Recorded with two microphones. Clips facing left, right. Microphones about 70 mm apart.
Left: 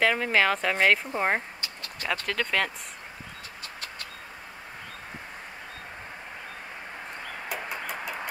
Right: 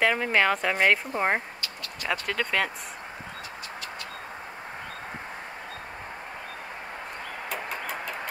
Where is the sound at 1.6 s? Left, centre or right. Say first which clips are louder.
Right 1 dB; left.